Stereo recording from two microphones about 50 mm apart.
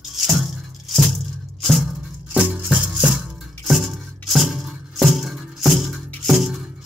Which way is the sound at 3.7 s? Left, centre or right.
Centre.